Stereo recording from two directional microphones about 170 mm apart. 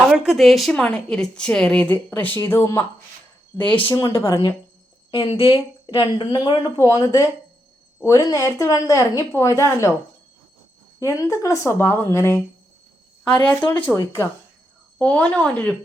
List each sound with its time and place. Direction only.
0.0 s a woman's voice: 5° right (ahead or behind); by 4.3 s 15° left (ahead or behind)
4.3 s a woman's voice: 30° left (ahead or behind)
6.7 s a woman's voice: 20° left (ahead or behind)
11.1 s speech: 20° left (ahead or behind)